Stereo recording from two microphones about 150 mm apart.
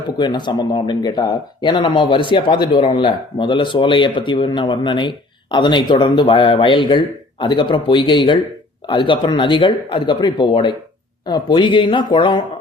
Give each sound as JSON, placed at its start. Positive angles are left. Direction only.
{"t": 0.2, "sound": "speech", "side_deg": 30}